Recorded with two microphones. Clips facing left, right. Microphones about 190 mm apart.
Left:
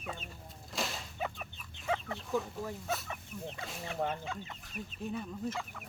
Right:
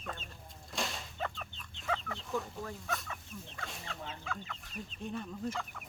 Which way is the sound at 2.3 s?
Centre (ahead or behind).